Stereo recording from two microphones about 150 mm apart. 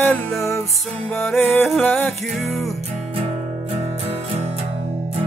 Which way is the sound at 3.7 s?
45° right (ahead or behind).